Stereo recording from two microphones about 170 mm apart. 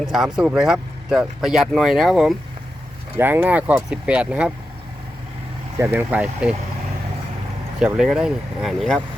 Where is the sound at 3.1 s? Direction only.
10° right (ahead or behind).